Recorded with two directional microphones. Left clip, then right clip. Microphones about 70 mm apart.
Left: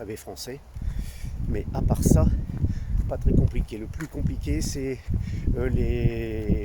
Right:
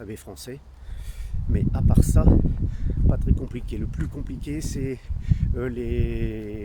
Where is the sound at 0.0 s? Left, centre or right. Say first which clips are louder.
Left 3 dB; right.